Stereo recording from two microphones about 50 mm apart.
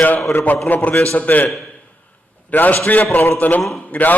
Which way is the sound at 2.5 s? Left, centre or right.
Left.